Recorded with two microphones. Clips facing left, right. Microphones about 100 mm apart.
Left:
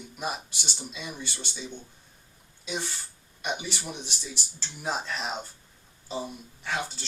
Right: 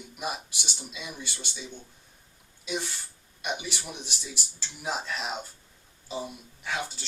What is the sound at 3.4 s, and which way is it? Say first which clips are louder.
Speech: left 1 dB; 5° right (ahead or behind).